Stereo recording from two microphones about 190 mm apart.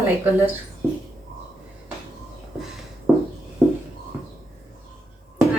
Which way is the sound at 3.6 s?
10° right (ahead or behind).